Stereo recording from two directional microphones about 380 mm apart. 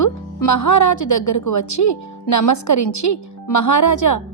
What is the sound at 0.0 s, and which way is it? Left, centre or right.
A woman's voice, left.